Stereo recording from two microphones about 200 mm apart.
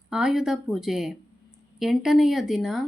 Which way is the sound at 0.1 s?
5° right (ahead or behind).